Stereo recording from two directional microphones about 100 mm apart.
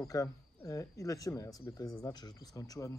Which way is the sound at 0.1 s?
35° left (ahead or behind).